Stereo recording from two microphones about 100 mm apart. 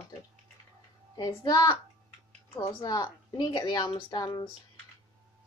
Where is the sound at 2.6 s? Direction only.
45° left (ahead or behind).